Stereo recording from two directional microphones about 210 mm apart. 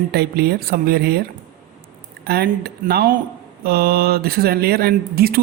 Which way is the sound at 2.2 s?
50° right (ahead or behind).